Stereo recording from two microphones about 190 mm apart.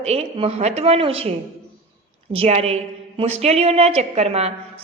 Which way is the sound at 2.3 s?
30° right (ahead or behind).